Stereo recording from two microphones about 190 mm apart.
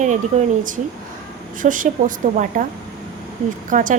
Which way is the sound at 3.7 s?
45° right (ahead or behind).